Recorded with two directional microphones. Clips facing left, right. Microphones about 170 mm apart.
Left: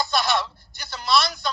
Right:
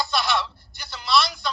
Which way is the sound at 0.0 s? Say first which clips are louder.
Left 1 dB; 45° left (ahead or behind).